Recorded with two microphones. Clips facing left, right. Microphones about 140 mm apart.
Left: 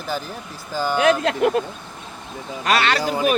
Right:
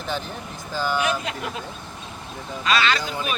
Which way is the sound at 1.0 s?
80° left.